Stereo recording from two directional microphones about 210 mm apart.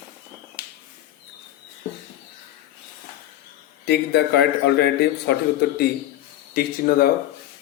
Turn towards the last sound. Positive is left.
turn(degrees=45)  # may be behind; listen again after turning